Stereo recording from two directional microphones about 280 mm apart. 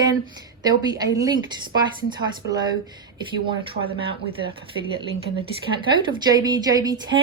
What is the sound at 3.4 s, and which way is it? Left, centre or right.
A woman's voice, centre.